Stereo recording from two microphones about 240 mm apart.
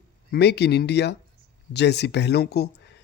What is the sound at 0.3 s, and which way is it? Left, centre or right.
Speech, left.